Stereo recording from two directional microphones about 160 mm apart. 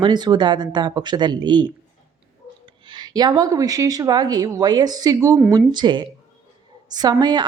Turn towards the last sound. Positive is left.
turn(degrees=-25)  # may be behind; listen again after turning